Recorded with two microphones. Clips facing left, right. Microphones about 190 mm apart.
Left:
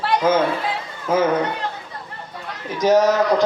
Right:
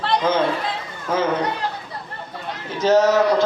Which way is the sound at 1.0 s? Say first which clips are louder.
Left 3 dB; 10° left (ahead or behind).